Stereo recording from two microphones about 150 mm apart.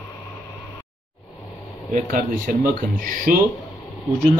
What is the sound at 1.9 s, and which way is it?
Speech, 65° right (ahead or behind).